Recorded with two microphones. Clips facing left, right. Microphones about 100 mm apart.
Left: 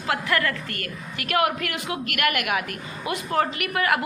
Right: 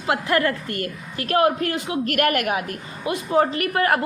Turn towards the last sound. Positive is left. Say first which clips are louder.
# right 3 dB
turn(degrees=-35)  # may be behind; listen again after turning